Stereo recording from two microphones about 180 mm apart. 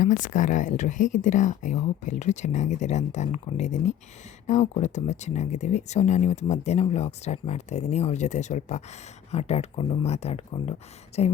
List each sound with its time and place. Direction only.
0.0 s speech: 45° left (ahead or behind)